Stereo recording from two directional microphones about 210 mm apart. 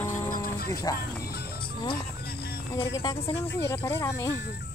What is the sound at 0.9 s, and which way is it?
Speech, 15° left (ahead or behind).